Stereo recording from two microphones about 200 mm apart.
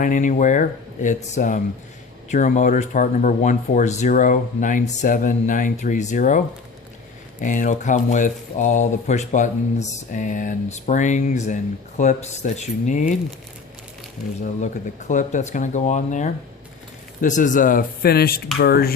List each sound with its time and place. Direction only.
0.0 s speech: 40° left (ahead or behind)
7.4 s speech: 40° left (ahead or behind)
14.4 s speech: 35° left (ahead or behind)